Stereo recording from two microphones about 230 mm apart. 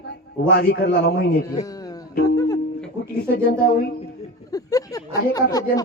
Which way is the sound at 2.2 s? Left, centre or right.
Centre.